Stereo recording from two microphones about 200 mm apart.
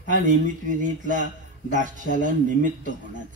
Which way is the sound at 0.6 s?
40° right (ahead or behind).